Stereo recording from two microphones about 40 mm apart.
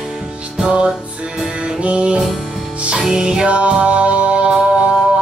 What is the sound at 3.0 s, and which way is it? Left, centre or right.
Music, centre.